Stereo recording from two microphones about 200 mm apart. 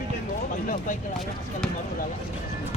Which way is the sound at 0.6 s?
40° left (ahead or behind).